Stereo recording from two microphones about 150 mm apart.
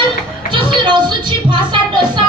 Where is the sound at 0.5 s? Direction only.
30° right (ahead or behind).